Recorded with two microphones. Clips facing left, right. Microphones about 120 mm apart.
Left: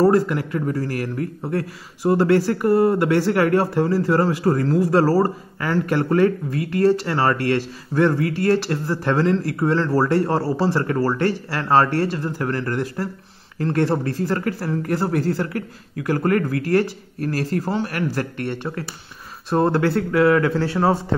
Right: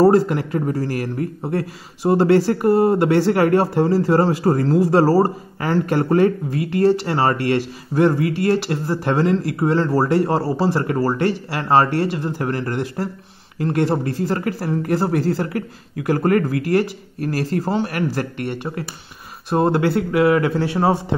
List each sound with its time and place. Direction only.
0.0 s a man's voice: 25° right (ahead or behind)